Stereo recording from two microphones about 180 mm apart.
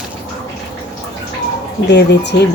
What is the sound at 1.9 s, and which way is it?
Speech, 70° left (ahead or behind).